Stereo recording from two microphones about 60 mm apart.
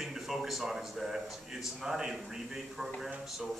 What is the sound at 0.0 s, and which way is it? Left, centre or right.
A man's voice, centre.